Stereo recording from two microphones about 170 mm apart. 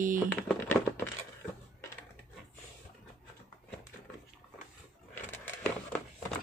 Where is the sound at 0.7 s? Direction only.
15° left (ahead or behind).